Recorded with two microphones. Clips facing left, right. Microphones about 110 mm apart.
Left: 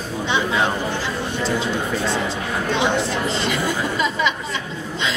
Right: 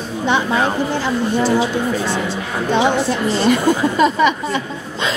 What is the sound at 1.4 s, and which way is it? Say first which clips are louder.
Speech: right 4 dB; 5° right (ahead or behind).